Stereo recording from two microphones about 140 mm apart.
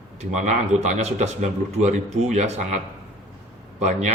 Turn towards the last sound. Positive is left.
turn(degrees=-55)  # may be behind; listen again after turning